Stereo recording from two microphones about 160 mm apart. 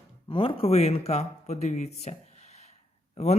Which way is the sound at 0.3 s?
35° left (ahead or behind).